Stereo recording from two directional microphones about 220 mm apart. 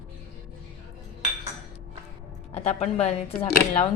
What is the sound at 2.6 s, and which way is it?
Speech, 30° left (ahead or behind).